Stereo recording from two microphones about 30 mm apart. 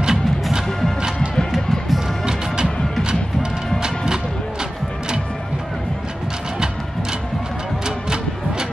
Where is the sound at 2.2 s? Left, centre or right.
Right.